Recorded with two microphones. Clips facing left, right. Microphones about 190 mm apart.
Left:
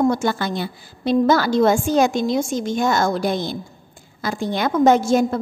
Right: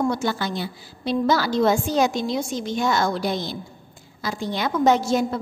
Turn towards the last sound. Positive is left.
turn(degrees=50)  # may be behind; listen again after turning